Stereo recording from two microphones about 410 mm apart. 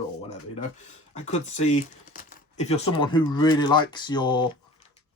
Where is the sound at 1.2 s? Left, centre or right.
Centre.